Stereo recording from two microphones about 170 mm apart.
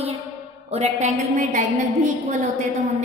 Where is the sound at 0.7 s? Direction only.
40° right (ahead or behind).